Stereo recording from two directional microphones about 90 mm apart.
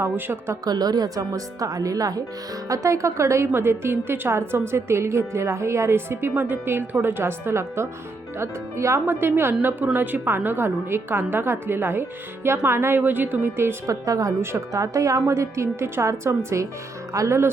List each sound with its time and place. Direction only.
0.0 s a woman's voice: 30° right (ahead or behind)
0.6 s a woman's voice: 45° right (ahead or behind); by 17.5 s 30° right (ahead or behind)